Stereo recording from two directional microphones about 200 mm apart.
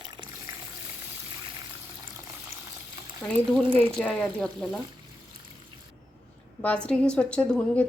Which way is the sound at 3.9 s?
5° left (ahead or behind).